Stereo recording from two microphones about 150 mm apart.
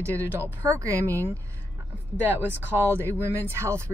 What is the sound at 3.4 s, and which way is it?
Speech, 20° right (ahead or behind).